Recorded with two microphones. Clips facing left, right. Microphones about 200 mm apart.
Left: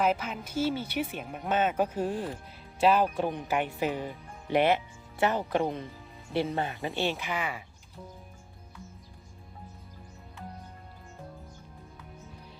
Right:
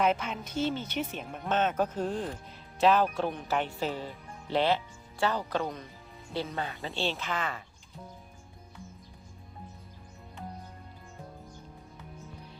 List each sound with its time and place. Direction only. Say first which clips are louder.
0.0 s speech: even; 5° left (ahead or behind); by 5.8 s 25° left (ahead or behind)
6.8 s speech: left 2 dB; 15° left (ahead or behind)